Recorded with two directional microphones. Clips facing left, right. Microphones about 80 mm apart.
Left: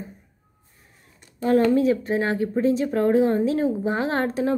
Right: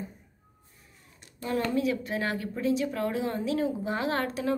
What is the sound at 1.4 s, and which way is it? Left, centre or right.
Speech, left.